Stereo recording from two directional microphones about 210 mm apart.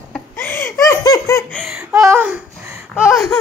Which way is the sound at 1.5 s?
Centre (ahead or behind).